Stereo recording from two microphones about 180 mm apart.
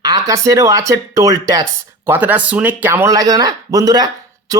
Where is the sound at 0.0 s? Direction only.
20° right (ahead or behind).